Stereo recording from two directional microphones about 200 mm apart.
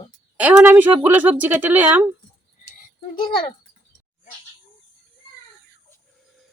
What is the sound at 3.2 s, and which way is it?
Speech, 25° left (ahead or behind).